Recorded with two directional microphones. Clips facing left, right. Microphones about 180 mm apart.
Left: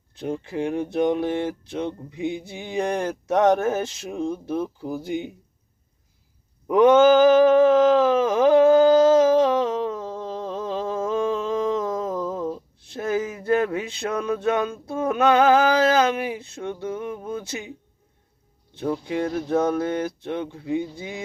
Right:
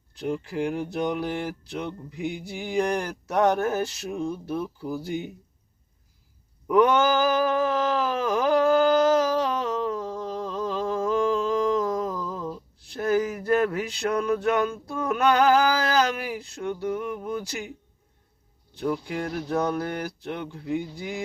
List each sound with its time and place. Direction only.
0.2 s speech: 20° left (ahead or behind)
6.7 s a sound: 20° left (ahead or behind)
18.8 s speech: 20° left (ahead or behind)